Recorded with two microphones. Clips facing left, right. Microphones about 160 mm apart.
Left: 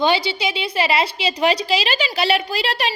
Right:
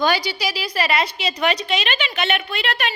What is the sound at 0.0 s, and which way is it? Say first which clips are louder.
A woman's voice: left 2 dB; 25° left (ahead or behind).